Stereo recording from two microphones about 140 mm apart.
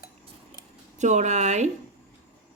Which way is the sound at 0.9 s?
60° right (ahead or behind).